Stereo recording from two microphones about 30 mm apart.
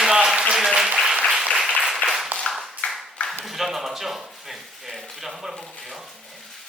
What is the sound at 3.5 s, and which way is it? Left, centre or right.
A man's voice, centre.